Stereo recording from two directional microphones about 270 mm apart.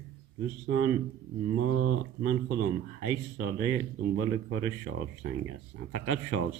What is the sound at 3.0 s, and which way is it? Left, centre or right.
Speech, right.